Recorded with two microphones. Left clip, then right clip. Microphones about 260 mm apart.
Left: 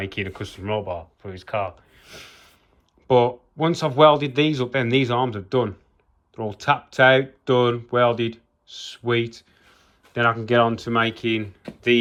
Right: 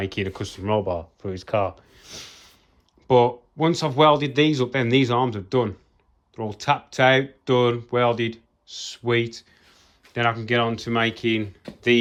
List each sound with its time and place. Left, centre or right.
0.0 s speech: centre
2.0 s a sound: centre
3.1 s speech: centre